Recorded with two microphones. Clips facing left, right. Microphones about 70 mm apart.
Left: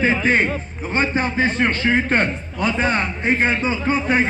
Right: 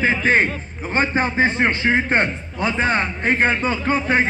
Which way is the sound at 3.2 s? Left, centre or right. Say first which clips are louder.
Even; right.